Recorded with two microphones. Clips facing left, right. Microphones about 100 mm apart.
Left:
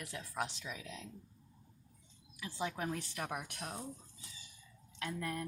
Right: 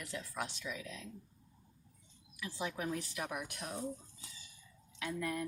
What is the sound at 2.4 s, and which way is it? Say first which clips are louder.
Speech: even; 35° left (ahead or behind).